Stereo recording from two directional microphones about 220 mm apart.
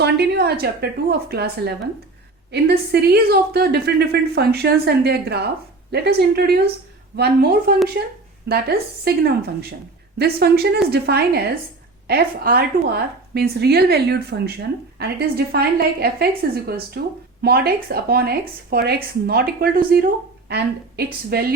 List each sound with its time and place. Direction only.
0.0 s a woman's voice: 45° right (ahead or behind)